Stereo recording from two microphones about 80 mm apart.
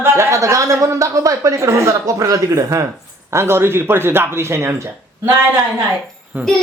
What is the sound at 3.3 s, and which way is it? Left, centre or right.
Speech, right.